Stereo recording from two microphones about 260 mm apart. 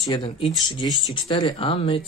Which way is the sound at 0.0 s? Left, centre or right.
Left.